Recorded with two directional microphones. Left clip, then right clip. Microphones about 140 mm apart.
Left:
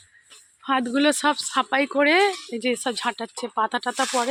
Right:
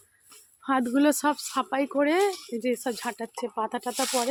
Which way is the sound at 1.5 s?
5° right (ahead or behind).